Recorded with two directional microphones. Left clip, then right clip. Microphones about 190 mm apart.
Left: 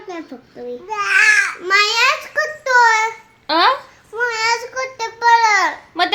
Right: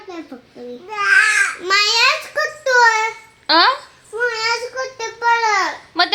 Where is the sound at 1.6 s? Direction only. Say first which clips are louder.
Left 1 dB; 40° right (ahead or behind).